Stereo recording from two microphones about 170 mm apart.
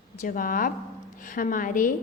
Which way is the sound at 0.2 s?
55° left (ahead or behind).